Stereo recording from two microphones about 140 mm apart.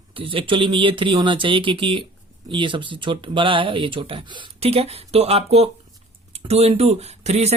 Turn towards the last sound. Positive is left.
turn(degrees=-50)  # may be behind; listen again after turning